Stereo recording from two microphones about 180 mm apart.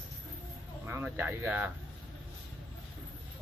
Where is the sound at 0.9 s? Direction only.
10° right (ahead or behind).